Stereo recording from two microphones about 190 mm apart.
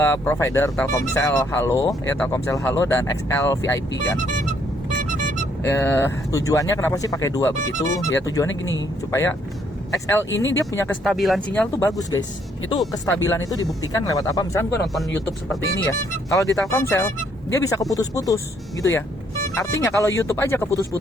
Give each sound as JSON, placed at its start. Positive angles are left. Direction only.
{"t": 0.0, "sound": "speech", "side_deg": 15}
{"t": 4.9, "sound": "vehicle", "side_deg": -45}
{"t": 5.6, "sound": "speech", "side_deg": 15}
{"t": 8.4, "sound": "speech", "side_deg": 90}
{"t": 10.3, "sound": "speech", "side_deg": 15}
{"t": 11.0, "sound": "speech", "side_deg": 0}